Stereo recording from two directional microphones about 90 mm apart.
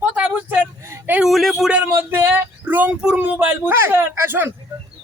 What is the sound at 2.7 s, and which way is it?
Speech, 15° right (ahead or behind).